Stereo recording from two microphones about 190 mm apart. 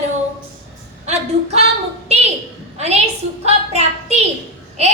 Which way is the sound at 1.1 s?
35° right (ahead or behind).